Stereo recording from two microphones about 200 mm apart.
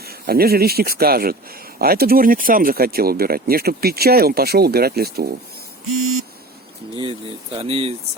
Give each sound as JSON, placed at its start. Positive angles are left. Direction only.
{"t": 0.0, "sound": "speech", "side_deg": -50}
{"t": 5.9, "sound": "vehicle", "side_deg": -90}
{"t": 6.9, "sound": "speech", "side_deg": -25}